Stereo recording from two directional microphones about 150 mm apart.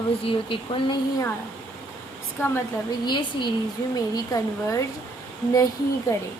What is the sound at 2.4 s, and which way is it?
Speech, 15° left (ahead or behind).